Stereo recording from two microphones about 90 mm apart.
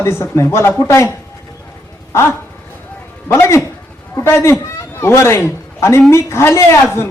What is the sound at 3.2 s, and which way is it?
A man's voice, 30° left (ahead or behind).